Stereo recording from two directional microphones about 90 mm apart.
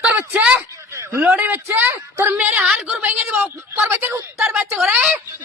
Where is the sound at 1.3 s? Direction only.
20° right (ahead or behind).